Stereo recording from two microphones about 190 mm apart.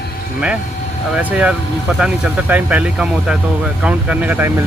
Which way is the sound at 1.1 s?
5° right (ahead or behind).